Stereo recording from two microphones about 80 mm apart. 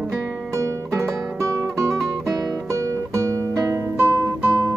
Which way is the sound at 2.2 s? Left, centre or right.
Right.